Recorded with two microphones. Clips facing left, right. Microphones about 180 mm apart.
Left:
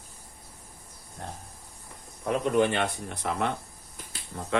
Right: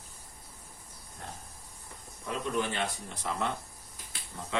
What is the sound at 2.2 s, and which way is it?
Speech, 60° left (ahead or behind).